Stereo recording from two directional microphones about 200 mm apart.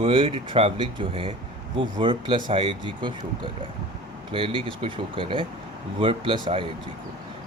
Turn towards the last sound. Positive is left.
turn(degrees=-25)  # may be behind; listen again after turning